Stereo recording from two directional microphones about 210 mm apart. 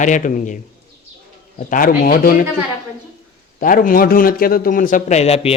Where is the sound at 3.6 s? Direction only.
40° left (ahead or behind).